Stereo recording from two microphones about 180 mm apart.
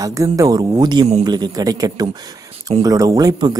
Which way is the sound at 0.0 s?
15° right (ahead or behind).